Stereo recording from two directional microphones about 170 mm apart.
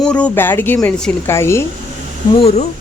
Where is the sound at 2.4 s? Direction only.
40° left (ahead or behind).